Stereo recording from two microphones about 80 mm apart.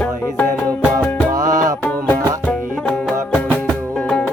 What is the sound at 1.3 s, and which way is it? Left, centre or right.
Music, right.